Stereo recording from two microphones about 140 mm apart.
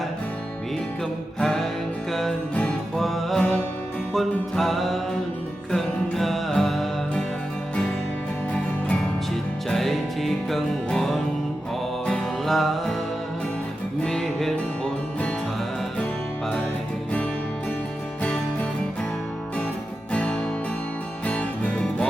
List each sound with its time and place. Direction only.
1.4 s music: 5° left (ahead or behind)
8.5 s music: 5° left (ahead or behind)
14.0 s music: 5° left (ahead or behind)
20.1 s music: 10° left (ahead or behind)